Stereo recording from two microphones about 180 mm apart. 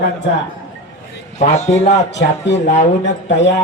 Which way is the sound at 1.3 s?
40° left (ahead or behind).